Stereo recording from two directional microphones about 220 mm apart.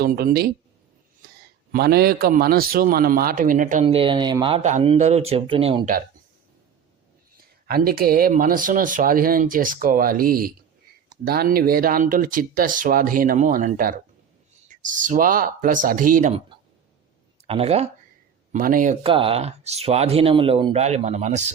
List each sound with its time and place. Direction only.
0.0 s speech: 40° right (ahead or behind)
1.7 s a man's voice: 45° right (ahead or behind); by 5.9 s 25° right (ahead or behind)
7.3 s a man's voice: 40° right (ahead or behind)
17.4 s speech: 25° right (ahead or behind)
18.5 s a man's voice: 40° right (ahead or behind)
19.0 s speech: 25° right (ahead or behind)